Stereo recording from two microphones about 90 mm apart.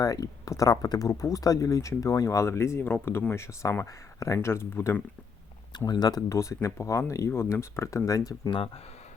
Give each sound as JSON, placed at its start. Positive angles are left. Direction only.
{"t": 0.0, "sound": "speech", "side_deg": 40}
{"t": 5.7, "sound": "speech", "side_deg": 50}
{"t": 6.3, "sound": "speech", "side_deg": 35}
{"t": 8.4, "sound": "speech", "side_deg": 80}